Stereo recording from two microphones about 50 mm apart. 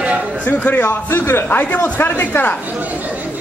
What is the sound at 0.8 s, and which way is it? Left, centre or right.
Speech, left.